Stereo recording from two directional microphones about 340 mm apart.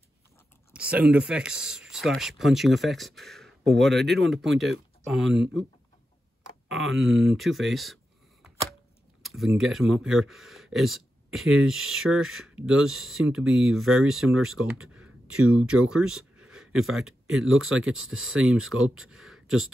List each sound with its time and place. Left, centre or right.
0.7 s speech: centre
6.7 s a sound: centre
9.2 s speech: centre
17.8 s speech: right
18.4 s speech: centre